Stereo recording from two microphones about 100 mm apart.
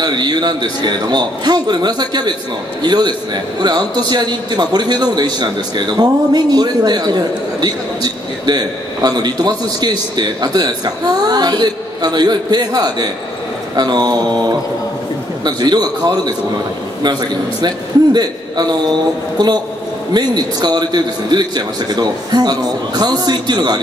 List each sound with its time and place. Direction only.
0.0 s a man's voice: 45° right (ahead or behind)